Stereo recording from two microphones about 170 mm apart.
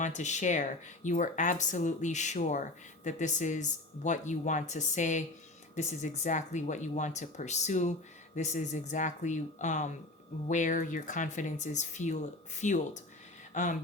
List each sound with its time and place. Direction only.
0.0 s speech: 45° left (ahead or behind)